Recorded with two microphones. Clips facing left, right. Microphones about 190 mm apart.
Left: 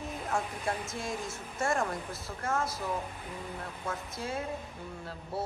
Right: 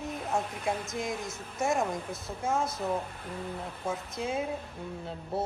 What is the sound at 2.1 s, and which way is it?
Speech, 20° right (ahead or behind).